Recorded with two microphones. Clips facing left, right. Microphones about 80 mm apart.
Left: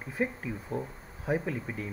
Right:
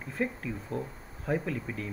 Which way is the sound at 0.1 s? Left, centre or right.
Centre.